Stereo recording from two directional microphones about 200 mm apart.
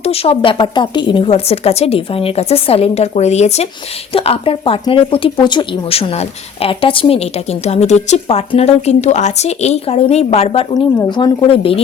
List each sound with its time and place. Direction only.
0.0 s a woman's voice: 30° left (ahead or behind)